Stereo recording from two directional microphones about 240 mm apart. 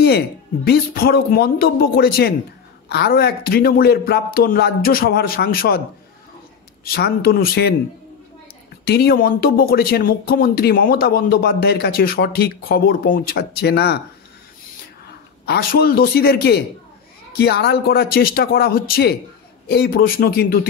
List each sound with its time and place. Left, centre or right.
0.7 s speech: left
6.8 s speech: left
8.8 s speech: left
15.4 s speech: left